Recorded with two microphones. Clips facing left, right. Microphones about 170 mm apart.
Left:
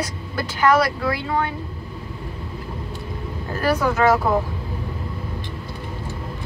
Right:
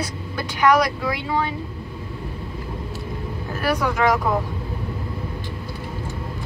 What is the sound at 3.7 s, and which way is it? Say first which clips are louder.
Speech: left 3 dB; 5° left (ahead or behind).